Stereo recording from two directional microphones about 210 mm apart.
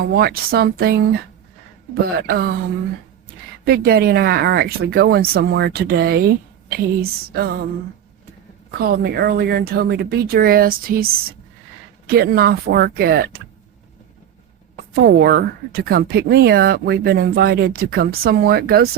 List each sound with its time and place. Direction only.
0.0 s speech: 50° right (ahead or behind)
2.0 s speech: 45° right (ahead or behind)
3.7 s speech: 50° right (ahead or behind)
8.8 s speech: 50° right (ahead or behind)
14.9 s speech: 50° right (ahead or behind)